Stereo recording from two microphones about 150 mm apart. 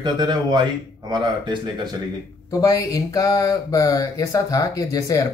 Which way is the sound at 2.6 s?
25° left (ahead or behind).